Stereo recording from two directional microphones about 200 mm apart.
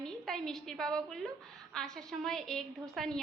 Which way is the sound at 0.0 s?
5° left (ahead or behind).